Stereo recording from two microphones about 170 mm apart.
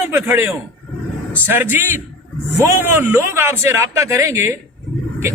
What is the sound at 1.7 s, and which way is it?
A man's voice, 15° right (ahead or behind).